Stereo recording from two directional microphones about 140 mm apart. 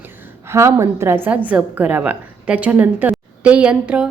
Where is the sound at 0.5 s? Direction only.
20° right (ahead or behind).